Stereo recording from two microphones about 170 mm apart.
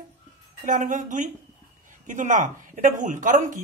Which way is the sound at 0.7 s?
50° right (ahead or behind).